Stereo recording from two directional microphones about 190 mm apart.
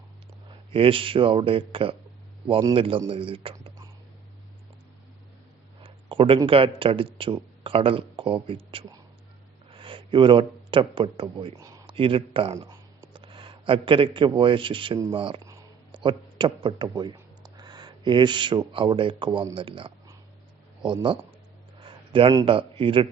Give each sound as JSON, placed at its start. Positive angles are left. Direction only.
{"t": 0.7, "sound": "speech", "side_deg": -30}
{"t": 5.8, "sound": "a man's voice", "side_deg": -30}